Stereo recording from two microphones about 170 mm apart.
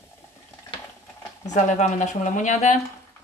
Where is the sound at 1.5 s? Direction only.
45° left (ahead or behind).